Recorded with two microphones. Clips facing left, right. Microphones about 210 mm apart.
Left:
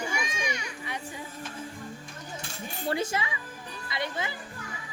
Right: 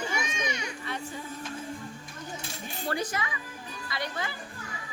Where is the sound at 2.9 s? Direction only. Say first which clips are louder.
Left 2 dB; 25° left (ahead or behind).